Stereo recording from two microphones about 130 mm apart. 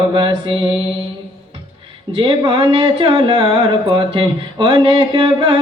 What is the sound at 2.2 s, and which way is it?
Speech, 40° right (ahead or behind).